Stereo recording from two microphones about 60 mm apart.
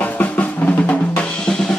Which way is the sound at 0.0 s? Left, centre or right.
Left.